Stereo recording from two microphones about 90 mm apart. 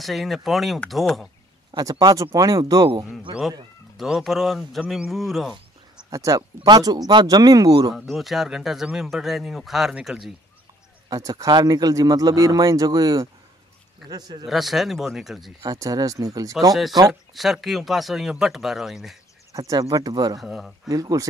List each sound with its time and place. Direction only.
0.0 s speech: centre (ahead or behind)
1.7 s speech: 45° right (ahead or behind)
3.9 s speech: centre (ahead or behind)
6.0 s speech: 40° right (ahead or behind)
8.1 s speech: centre (ahead or behind)
11.1 s speech: 40° right (ahead or behind)
14.4 s speech: centre (ahead or behind)
15.6 s speech: 40° right (ahead or behind)
17.1 s speech: centre (ahead or behind)
19.5 s speech: 40° right (ahead or behind)
20.3 s speech: centre (ahead or behind)
20.9 s speech: 40° right (ahead or behind)